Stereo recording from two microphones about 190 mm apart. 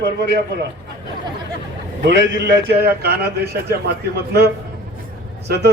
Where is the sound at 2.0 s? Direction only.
70° right (ahead or behind).